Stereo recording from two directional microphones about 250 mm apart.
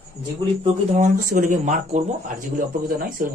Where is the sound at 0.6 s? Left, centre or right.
Right.